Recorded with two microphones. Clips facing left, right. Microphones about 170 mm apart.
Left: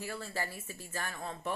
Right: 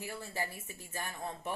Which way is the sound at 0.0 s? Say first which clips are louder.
Left 1 dB; 15° right (ahead or behind).